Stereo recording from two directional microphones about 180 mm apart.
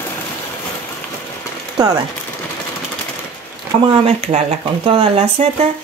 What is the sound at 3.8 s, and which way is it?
Speech, 35° right (ahead or behind).